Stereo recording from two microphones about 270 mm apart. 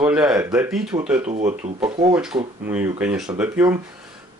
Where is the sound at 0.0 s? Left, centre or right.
Centre.